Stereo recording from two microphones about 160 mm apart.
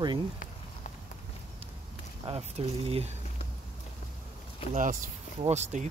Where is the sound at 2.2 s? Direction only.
40° right (ahead or behind).